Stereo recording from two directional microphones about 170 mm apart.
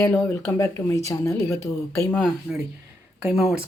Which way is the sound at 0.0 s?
15° left (ahead or behind).